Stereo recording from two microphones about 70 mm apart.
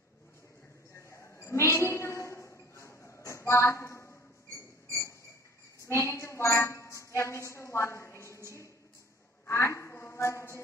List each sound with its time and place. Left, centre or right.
0.9 s a sound: left
5.9 s a woman's voice: left
9.5 s a woman's voice: left